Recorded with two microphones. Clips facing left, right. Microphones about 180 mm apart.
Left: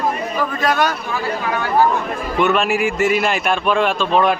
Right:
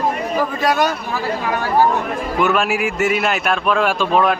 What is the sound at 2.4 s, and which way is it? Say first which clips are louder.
A man's voice: left 1 dB; 5° right (ahead or behind).